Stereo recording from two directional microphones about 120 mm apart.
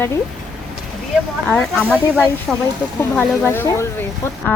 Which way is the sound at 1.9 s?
10° left (ahead or behind).